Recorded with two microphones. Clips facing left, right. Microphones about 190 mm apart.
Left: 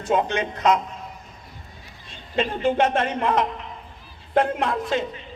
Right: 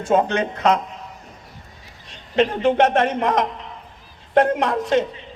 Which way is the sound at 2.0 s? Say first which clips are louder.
Right 6 dB; 70° right (ahead or behind).